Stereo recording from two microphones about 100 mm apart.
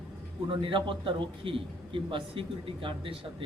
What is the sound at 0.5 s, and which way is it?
A man's voice, 55° right (ahead or behind).